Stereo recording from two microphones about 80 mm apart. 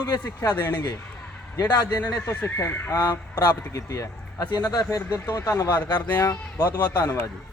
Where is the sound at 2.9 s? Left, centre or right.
Left.